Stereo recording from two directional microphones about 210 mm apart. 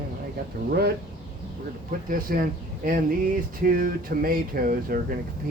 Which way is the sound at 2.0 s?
45° right (ahead or behind).